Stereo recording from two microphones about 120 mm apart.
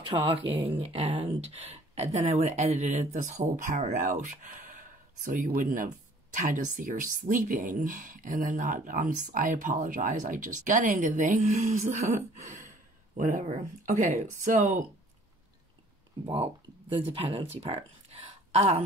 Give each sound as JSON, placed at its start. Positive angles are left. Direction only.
{"t": 0.3, "sound": "speech", "side_deg": -50}
{"t": 2.0, "sound": "speech", "side_deg": -65}
{"t": 12.4, "sound": "gasp", "side_deg": -85}
{"t": 13.2, "sound": "speech", "side_deg": -90}
{"t": 16.9, "sound": "speech", "side_deg": -50}